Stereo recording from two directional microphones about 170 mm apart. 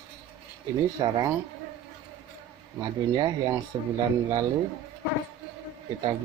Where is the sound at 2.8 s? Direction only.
25° right (ahead or behind).